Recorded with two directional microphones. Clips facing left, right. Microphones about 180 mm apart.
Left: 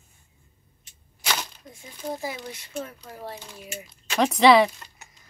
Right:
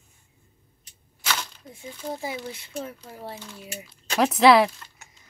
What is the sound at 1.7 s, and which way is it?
Speech, 25° right (ahead or behind).